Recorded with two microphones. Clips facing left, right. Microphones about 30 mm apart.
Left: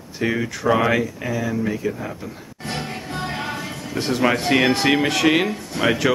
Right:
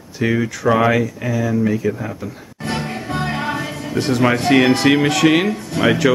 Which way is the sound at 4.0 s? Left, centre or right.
Centre.